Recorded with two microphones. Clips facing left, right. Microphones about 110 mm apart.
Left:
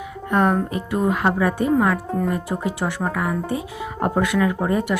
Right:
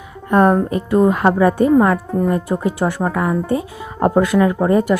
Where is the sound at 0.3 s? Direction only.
40° right (ahead or behind).